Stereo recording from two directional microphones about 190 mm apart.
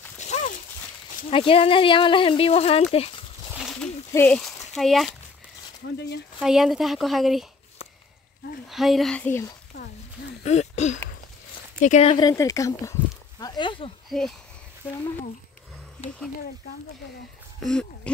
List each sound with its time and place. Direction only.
0.2 s a sound: 40° left (ahead or behind)
1.3 s speech: 30° left (ahead or behind)
3.5 s a sound: centre (ahead or behind)
4.1 s speech: 10° left (ahead or behind)
5.9 s speech: 65° left (ahead or behind)
6.4 s speech: centre (ahead or behind)
8.6 s speech: centre (ahead or behind)
10.4 s throat clearing: 35° left (ahead or behind)
11.8 s speech: 35° left (ahead or behind)
12.3 s speech: 15° left (ahead or behind)
14.0 s speech: centre (ahead or behind)
16.0 s speech: 35° left (ahead or behind)
17.6 s speech: 5° left (ahead or behind)